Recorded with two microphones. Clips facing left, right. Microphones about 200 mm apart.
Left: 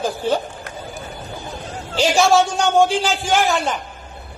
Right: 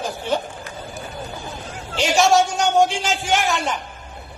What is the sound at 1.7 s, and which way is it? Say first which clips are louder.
A man's voice: left 3 dB; 30° left (ahead or behind).